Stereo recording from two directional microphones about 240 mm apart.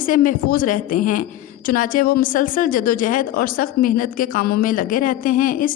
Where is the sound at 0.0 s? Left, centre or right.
Left.